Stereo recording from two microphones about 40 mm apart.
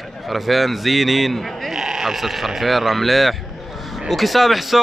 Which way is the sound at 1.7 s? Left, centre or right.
Centre.